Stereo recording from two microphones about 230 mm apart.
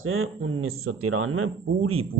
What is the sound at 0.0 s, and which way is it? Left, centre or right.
Speech, right.